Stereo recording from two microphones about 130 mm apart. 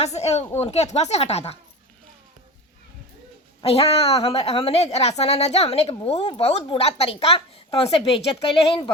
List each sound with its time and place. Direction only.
0.0 s a woman's voice: 55° left (ahead or behind)
3.6 s a woman's voice: 50° left (ahead or behind)